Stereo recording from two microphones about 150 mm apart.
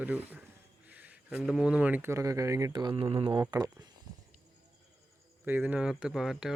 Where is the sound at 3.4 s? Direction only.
25° right (ahead or behind).